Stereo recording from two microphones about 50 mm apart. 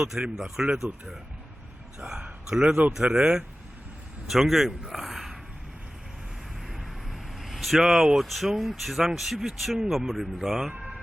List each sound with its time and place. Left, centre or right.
0.0 s speech: centre
2.0 s a man's voice: right
4.3 s a man's voice: centre
6.7 s vehicle: centre
7.8 s speech: centre
10.7 s music: centre